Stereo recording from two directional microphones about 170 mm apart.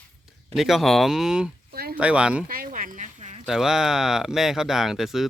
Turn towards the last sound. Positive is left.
turn(degrees=0)  # may be behind; listen again after turning